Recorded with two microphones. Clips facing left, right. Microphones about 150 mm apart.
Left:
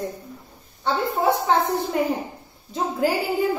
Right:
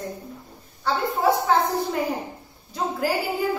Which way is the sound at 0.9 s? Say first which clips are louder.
Left 1 dB; 20° left (ahead or behind).